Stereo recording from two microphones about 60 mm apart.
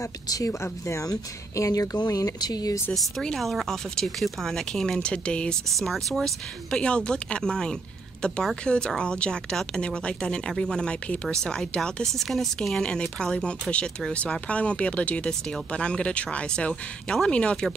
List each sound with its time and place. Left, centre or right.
0.0 s speech: left
0.6 s speech: left
1.0 s speech: left
3.3 s speech: centre
5.7 s speech: centre
6.7 s speech: centre